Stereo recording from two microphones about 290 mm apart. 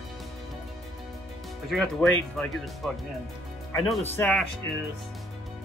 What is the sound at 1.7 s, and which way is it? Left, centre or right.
Speech, centre.